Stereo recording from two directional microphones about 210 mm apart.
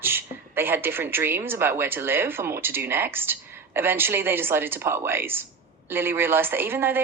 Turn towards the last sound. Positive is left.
turn(degrees=-10)  # may be behind; listen again after turning